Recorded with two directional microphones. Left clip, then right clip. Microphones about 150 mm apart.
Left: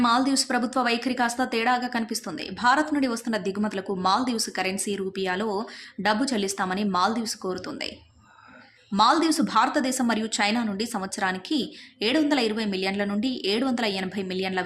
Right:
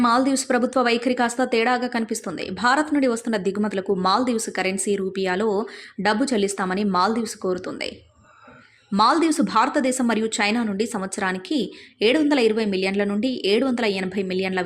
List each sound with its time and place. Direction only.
0.0 s a woman's voice: 25° right (ahead or behind)